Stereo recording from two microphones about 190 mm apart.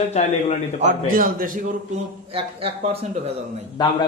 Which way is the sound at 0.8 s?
45° right (ahead or behind).